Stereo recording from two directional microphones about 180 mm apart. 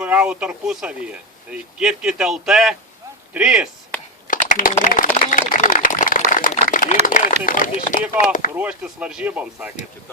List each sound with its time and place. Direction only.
0.0 s speech: 5° right (ahead or behind)
4.3 s speech: 50° left (ahead or behind)
5.3 s a sound: 45° left (ahead or behind)
7.0 s speech: 45° left (ahead or behind)
8.5 s speech: 5° right (ahead or behind)